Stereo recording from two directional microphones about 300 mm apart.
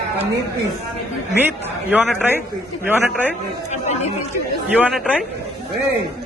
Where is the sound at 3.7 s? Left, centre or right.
Left.